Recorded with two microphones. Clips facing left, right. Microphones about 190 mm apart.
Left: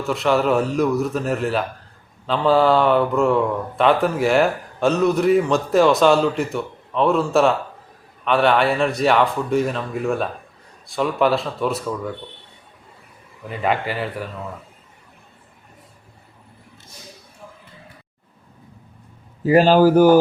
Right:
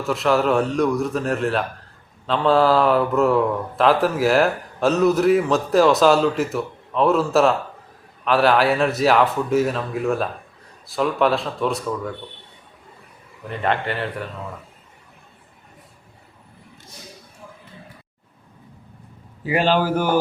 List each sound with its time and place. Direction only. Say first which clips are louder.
0.0 s a man's voice: even; centre (ahead or behind)
13.5 s a man's voice: left 1 dB; 5° left (ahead or behind)
19.5 s a man's voice: left 6 dB; 40° left (ahead or behind)